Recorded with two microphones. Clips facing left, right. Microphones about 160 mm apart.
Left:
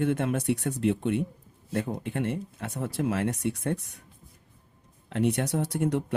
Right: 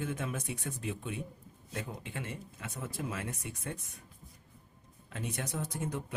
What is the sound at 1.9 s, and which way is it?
Speech, 55° left (ahead or behind).